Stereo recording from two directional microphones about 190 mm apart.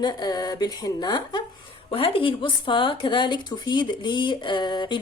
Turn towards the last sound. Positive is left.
turn(degrees=25)  # may be behind; listen again after turning